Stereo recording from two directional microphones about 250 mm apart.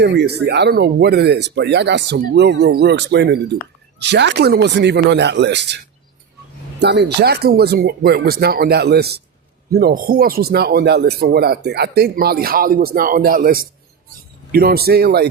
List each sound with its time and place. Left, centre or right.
0.0 s speech: right